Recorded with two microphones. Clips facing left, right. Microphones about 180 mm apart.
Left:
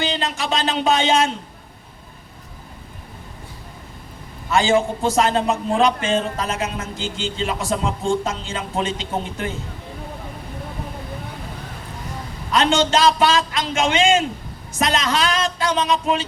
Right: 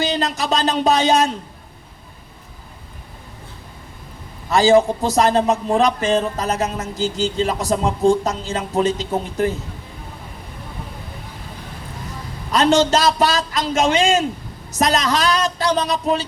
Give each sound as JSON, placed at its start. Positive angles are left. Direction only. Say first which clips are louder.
{"t": 0.0, "sound": "a man's voice", "louder": "right 3 dB", "side_deg": -40}
{"t": 4.4, "sound": "a man's voice", "louder": "right 4 dB", "side_deg": -35}
{"t": 12.5, "sound": "a man's voice", "louder": "right 3 dB", "side_deg": -40}